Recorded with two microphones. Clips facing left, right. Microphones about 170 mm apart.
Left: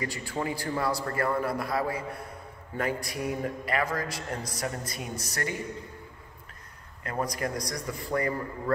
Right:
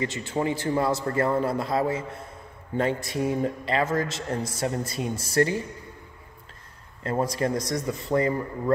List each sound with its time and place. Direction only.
0.0 s a man's voice: 20° right (ahead or behind)
7.0 s a man's voice: 25° right (ahead or behind)